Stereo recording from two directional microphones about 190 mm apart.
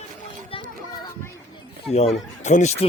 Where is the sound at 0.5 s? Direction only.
30° left (ahead or behind).